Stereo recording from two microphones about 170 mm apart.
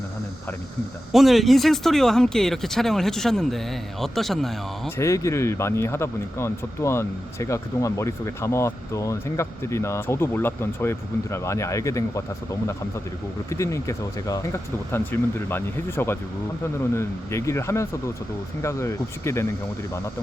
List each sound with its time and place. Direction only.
1.1 s speech: centre (ahead or behind)
4.9 s speech: 15° left (ahead or behind)
13.5 s speech: 20° left (ahead or behind)